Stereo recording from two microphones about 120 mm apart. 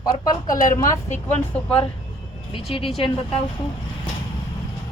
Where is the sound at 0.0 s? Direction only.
30° left (ahead or behind).